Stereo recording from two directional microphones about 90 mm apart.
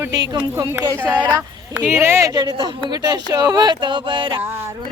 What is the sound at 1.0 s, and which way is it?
A woman's voice, 20° right (ahead or behind).